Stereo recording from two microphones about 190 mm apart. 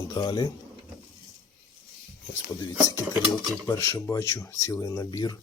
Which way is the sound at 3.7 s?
15° left (ahead or behind).